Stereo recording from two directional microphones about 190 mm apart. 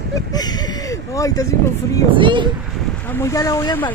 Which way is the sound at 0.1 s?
20° left (ahead or behind).